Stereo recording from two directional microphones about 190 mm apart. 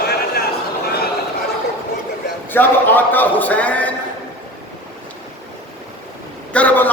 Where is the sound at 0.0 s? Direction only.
55° left (ahead or behind).